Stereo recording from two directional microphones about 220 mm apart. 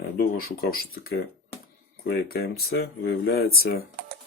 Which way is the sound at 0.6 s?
40° left (ahead or behind).